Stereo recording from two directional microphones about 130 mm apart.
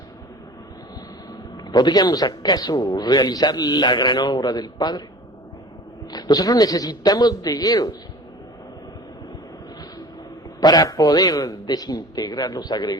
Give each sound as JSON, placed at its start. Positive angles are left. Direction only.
{"t": 1.6, "sound": "speech", "side_deg": 35}
{"t": 6.1, "sound": "a man's voice", "side_deg": 30}
{"t": 10.6, "sound": "speech", "side_deg": 30}